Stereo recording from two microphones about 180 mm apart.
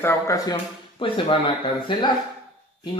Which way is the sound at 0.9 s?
30° left (ahead or behind).